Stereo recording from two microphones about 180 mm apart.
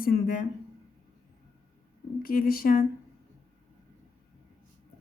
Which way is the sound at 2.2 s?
55° left (ahead or behind).